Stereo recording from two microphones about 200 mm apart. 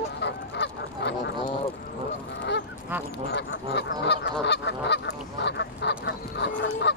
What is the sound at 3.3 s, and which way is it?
Goose, 60° left (ahead or behind).